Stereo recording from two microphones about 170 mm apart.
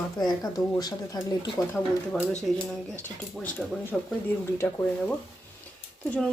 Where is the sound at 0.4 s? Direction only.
20° left (ahead or behind).